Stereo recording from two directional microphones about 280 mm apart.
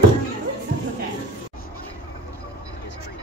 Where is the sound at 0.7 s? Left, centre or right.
Right.